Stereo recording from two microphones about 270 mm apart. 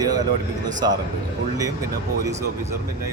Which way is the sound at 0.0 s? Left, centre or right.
Centre.